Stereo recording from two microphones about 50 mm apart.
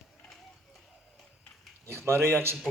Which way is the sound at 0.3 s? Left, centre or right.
Centre.